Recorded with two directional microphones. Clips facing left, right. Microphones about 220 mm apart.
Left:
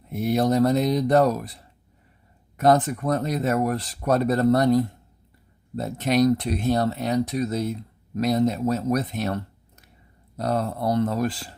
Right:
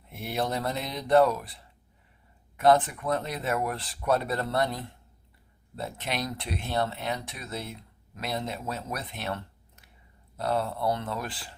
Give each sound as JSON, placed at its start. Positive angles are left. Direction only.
{"t": 0.1, "sound": "speech", "side_deg": 40}